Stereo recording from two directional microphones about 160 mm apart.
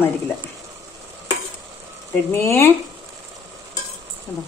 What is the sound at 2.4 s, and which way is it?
Speech, 15° left (ahead or behind).